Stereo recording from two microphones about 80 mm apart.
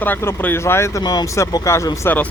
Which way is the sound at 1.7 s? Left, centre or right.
Left.